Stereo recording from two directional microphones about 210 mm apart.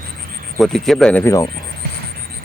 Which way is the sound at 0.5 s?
Centre (ahead or behind).